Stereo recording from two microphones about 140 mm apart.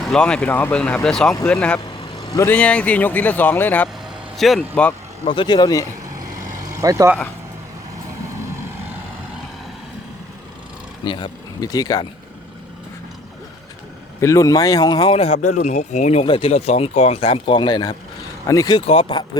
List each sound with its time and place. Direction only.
0.0 s speech: 5° left (ahead or behind)
4.4 s speech: centre (ahead or behind)
4.7 s speech: 10° left (ahead or behind)
5.2 s speech: 40° left (ahead or behind)
6.1 s vehicle: 25° right (ahead or behind)
11.0 s speech: 35° left (ahead or behind)
14.2 s speech: 20° left (ahead or behind)
15.2 s speech: 50° left (ahead or behind)
15.5 s speech: 65° left (ahead or behind)
16.2 s speech: 40° left (ahead or behind); by 18.8 s 25° left (ahead or behind)
18.9 s speech: 40° left (ahead or behind)